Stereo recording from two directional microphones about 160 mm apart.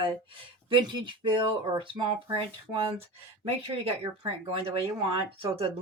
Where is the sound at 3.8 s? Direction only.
35° right (ahead or behind).